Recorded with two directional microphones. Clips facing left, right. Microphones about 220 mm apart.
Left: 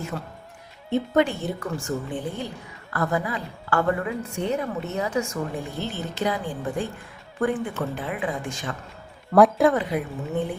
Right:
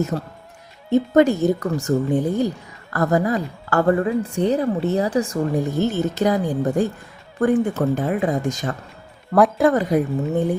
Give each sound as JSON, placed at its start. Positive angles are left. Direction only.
{"t": 0.1, "sound": "a woman's voice", "side_deg": -40}
{"t": 9.3, "sound": "speech", "side_deg": 0}
{"t": 9.7, "sound": "speech", "side_deg": -40}